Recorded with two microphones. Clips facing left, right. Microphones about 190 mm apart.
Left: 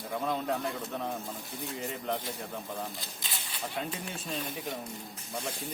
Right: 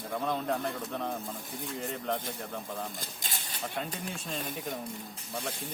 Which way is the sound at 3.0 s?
45° right (ahead or behind).